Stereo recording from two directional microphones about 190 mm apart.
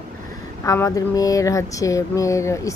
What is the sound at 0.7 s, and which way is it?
Speech, 15° left (ahead or behind).